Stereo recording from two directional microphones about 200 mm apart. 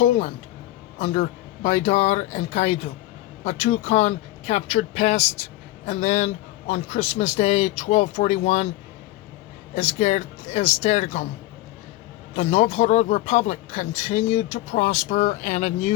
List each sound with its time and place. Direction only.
0.0 s speech: 35° left (ahead or behind)
9.7 s speech: 35° left (ahead or behind)
12.4 s speech: 30° left (ahead or behind)